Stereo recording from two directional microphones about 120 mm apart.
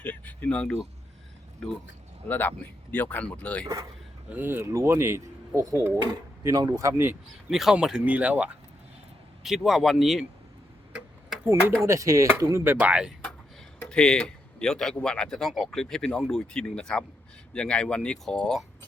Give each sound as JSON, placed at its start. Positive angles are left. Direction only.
{"t": 0.0, "sound": "speech", "side_deg": 10}
{"t": 2.2, "sound": "speech", "side_deg": 15}
{"t": 4.3, "sound": "speech", "side_deg": -15}
{"t": 7.5, "sound": "speech", "side_deg": -5}
{"t": 11.9, "sound": "speech", "side_deg": -25}
{"t": 12.8, "sound": "speech", "side_deg": -10}
{"t": 13.9, "sound": "speech", "side_deg": 5}